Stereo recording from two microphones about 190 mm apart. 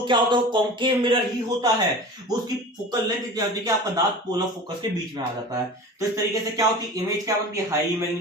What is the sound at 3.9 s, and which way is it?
Speech, 20° right (ahead or behind).